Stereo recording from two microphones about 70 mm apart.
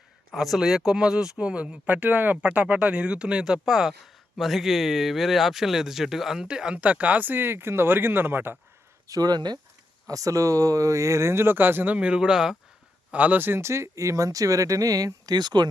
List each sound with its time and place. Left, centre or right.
0.3 s speech: centre; by 8.5 s right
9.0 s speech: right
10.1 s speech: right
11.9 s speech: centre
13.1 s speech: right